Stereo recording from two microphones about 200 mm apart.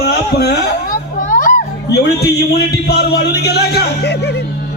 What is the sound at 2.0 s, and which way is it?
Speech, 55° left (ahead or behind).